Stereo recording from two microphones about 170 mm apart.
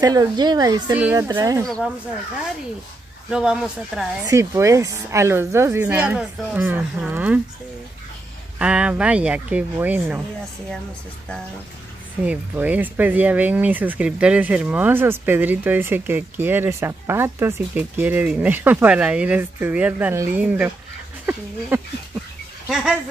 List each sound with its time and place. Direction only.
0.0 s speech: 20° right (ahead or behind)
3.3 s speech: 5° right (ahead or behind)
4.2 s speech: 20° right (ahead or behind)
8.5 s speech: 5° right (ahead or behind)
12.3 s speech: 10° right (ahead or behind)